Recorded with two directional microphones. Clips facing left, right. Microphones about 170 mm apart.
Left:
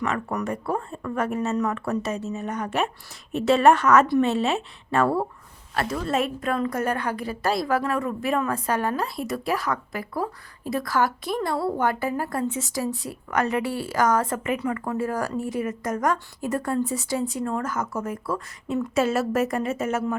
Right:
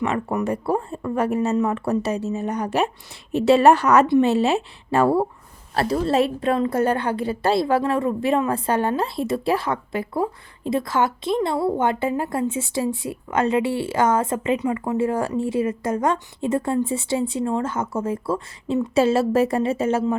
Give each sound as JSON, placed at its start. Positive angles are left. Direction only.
{"t": 0.0, "sound": "speech", "side_deg": -25}
{"t": 4.0, "sound": "a woman's voice", "side_deg": -25}
{"t": 4.3, "sound": "a woman's voice", "side_deg": -35}